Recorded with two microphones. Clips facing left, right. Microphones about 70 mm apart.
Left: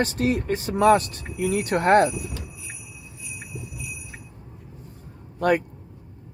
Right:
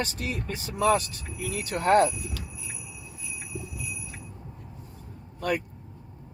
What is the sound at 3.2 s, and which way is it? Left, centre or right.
Jingle bell, right.